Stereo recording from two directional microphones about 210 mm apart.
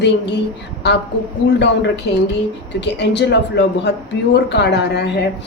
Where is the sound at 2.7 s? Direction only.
55° left (ahead or behind).